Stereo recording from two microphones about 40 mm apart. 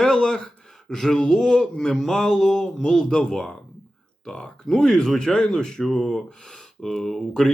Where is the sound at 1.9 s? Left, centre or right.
Centre.